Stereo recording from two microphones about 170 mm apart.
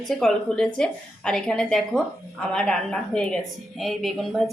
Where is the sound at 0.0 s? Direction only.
Centre (ahead or behind).